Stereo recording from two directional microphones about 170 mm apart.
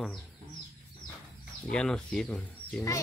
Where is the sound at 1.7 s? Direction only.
5° left (ahead or behind).